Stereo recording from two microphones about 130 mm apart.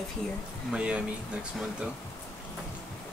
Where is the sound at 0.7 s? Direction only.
10° right (ahead or behind).